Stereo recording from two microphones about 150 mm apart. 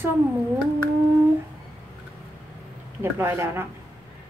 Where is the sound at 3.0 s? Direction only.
15° right (ahead or behind).